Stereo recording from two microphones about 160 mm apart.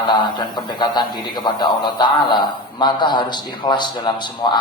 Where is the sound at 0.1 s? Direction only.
30° left (ahead or behind).